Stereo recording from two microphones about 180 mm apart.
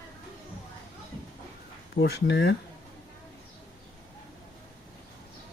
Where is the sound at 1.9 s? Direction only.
65° left (ahead or behind).